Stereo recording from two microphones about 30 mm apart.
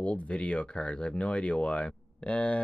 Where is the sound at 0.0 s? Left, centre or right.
Left.